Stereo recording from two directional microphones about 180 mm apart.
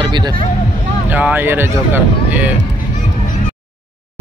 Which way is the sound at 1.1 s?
10° right (ahead or behind).